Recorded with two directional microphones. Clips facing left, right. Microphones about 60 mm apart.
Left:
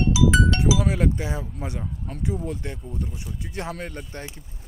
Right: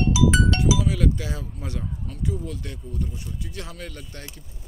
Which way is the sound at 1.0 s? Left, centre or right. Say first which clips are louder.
Left 1 dB; left.